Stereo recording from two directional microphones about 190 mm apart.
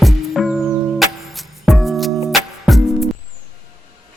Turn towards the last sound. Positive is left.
turn(degrees=0)  # may be behind; listen again after turning